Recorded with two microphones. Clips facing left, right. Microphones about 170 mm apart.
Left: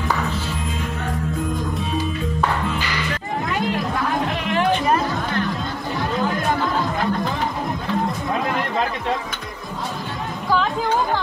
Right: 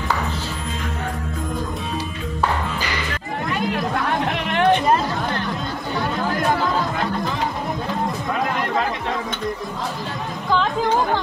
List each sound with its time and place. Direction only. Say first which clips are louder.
4.5 s chatter: right 3 dB; 65° right (ahead or behind)